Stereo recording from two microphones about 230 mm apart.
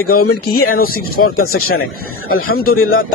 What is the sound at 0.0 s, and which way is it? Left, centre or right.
Speech, left.